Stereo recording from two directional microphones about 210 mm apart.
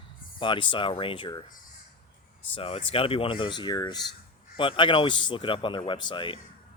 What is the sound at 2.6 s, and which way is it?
Speech, 25° left (ahead or behind).